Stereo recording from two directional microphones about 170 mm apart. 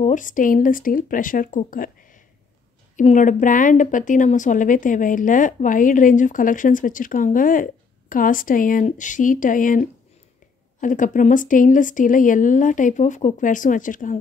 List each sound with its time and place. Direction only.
0.0 s a woman's voice: 50° left (ahead or behind)